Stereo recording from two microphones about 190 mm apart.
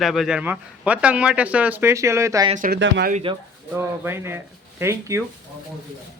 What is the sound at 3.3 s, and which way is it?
Speech, 25° right (ahead or behind).